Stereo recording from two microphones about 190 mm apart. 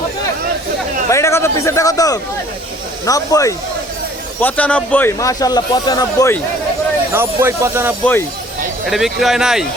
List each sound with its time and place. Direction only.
1.1 s a man's voice: 15° left (ahead or behind)
7.1 s speech: 10° right (ahead or behind)
8.9 s speech: centre (ahead or behind)